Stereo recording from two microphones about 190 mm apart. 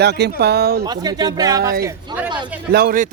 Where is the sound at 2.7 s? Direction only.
50° right (ahead or behind).